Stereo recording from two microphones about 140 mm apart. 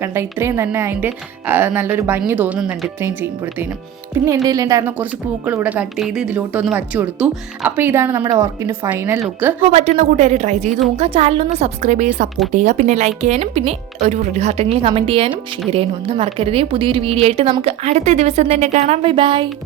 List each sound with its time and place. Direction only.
0.0 s a woman's voice: 15° right (ahead or behind)
4.4 s a woman's voice: 25° right (ahead or behind)
9.7 s a woman's voice: 50° right (ahead or behind)
10.9 s a woman's voice: 45° right (ahead or behind)